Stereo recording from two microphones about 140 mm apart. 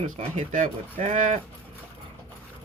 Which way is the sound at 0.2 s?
55° right (ahead or behind).